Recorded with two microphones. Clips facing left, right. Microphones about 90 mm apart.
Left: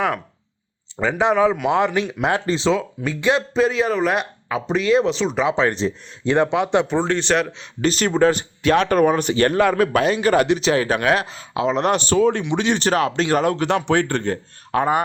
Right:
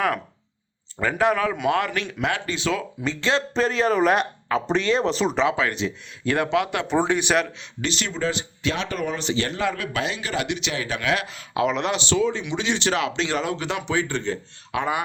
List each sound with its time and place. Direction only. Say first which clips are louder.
0.9 s speech: left 3 dB; 20° left (ahead or behind)
2.2 s speech: left 6 dB; 35° left (ahead or behind)
3.0 s speech: left 4 dB; 10° left (ahead or behind)
3.5 s speech: left 2 dB; 5° left (ahead or behind)
5.5 s speech: left 4 dB; 30° left (ahead or behind)
6.2 s speech: left 4 dB; 20° left (ahead or behind)
7.0 s speech: left 2 dB; 15° right (ahead or behind)
7.6 s speech: left 8 dB; 45° left (ahead or behind)
11.8 s speech: left 5 dB; 45° left (ahead or behind)